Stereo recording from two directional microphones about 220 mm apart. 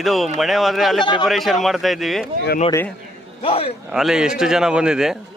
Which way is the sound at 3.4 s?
25° left (ahead or behind).